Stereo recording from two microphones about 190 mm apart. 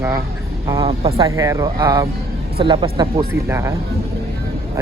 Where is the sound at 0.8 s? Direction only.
30° right (ahead or behind).